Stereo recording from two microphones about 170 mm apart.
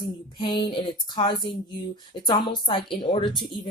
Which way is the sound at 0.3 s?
25° left (ahead or behind).